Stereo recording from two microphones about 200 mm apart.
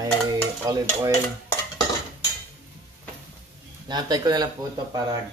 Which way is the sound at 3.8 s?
20° right (ahead or behind).